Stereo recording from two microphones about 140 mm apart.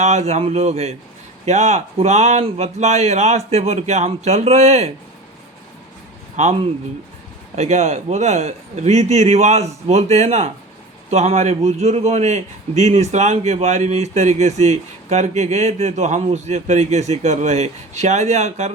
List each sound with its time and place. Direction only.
0.0 s a man's voice: 55° right (ahead or behind)
6.3 s a man's voice: 50° right (ahead or behind)